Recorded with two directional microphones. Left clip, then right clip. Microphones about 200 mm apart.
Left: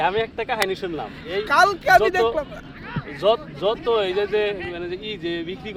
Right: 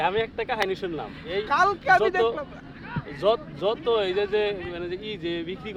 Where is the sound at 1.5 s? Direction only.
55° left (ahead or behind).